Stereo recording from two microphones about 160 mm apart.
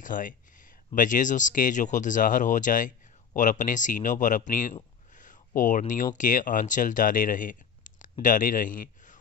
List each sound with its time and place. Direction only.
0.0 s speech: 55° left (ahead or behind)
5.1 s a sound: 55° left (ahead or behind)
6.1 s speech: 55° left (ahead or behind)